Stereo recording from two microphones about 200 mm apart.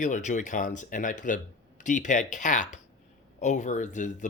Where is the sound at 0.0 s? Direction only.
40° left (ahead or behind).